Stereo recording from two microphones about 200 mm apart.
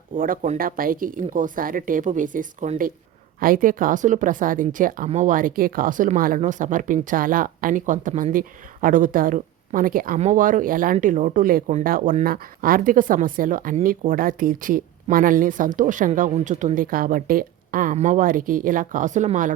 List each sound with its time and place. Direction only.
0.2 s a woman's voice: 40° right (ahead or behind)